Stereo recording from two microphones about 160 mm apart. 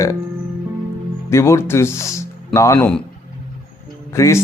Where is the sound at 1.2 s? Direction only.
15° left (ahead or behind).